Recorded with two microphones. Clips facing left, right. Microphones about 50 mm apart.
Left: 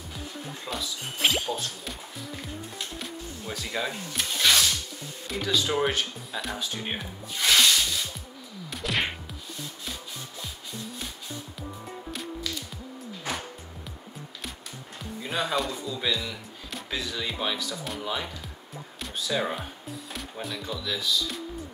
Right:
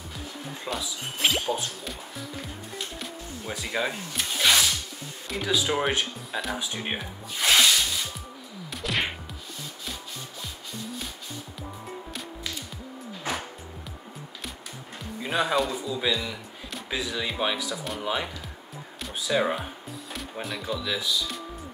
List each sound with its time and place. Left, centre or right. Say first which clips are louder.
0.7 s speech: right 2 dB; centre
3.4 s speech: right 3 dB; centre
4.1 s music: even; centre
5.3 s speech: right 1 dB; centre
7.0 s rub: right 1 dB; centre
8.6 s whack: even; centre
15.2 s speech: right 3 dB; centre
18.9 s music: right 3 dB; centre
20.4 s speech: right 3 dB; centre
20.8 s speech: right 2 dB; centre